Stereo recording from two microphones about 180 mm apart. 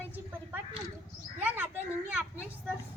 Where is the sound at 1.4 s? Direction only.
10° right (ahead or behind).